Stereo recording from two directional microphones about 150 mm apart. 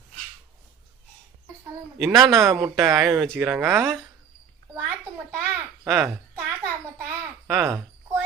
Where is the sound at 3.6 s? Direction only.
15° right (ahead or behind).